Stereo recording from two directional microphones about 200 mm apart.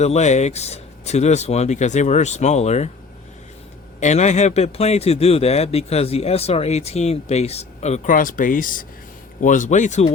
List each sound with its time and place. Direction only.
0.0 s a man's voice: 35° left (ahead or behind)
4.0 s a man's voice: 35° left (ahead or behind)